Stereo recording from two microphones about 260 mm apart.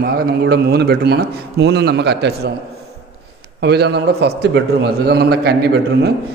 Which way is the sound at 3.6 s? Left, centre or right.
Right.